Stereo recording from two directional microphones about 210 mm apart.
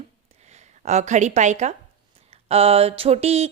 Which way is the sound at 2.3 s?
30° right (ahead or behind).